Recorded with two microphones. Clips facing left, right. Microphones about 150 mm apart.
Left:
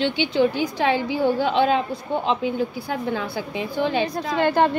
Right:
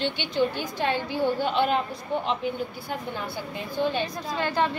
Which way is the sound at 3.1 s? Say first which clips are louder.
Left 6 dB; 90° left.